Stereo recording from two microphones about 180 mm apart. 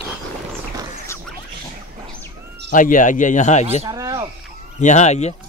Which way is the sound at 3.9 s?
20° right (ahead or behind).